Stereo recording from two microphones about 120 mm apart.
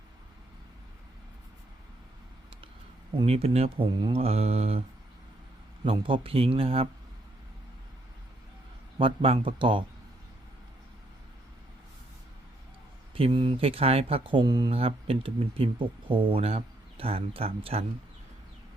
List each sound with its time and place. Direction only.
3.2 s mantra: 55° right (ahead or behind)
3.9 s mantra: 45° right (ahead or behind)
5.8 s speech: 45° right (ahead or behind)
9.0 s speech: 50° right (ahead or behind)
13.1 s speech: 45° right (ahead or behind)
14.7 s speech: 50° right (ahead or behind)